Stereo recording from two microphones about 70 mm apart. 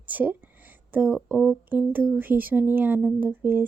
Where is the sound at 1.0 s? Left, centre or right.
Centre.